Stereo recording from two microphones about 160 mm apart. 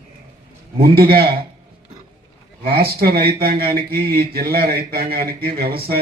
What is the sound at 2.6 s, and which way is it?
Speech, 75° right (ahead or behind).